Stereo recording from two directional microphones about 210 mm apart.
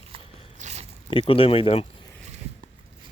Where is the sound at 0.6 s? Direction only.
30° right (ahead or behind).